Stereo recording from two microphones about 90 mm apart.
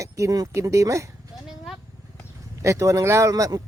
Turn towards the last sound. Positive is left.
turn(degrees=-40)  # may be behind; listen again after turning